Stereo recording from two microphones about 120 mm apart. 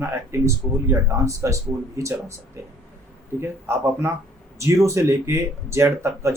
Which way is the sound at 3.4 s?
20° right (ahead or behind).